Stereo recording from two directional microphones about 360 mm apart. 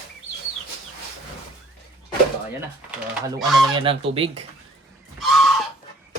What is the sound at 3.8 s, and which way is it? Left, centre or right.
Speech, centre.